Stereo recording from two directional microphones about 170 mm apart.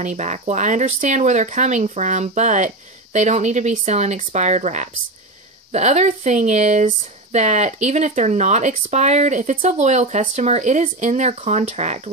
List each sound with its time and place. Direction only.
0.0 s speech: 45° right (ahead or behind)